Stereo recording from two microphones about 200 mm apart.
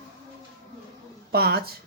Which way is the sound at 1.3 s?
50° right (ahead or behind).